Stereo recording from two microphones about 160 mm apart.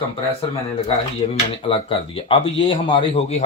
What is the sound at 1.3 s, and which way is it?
Speech, 35° left (ahead or behind).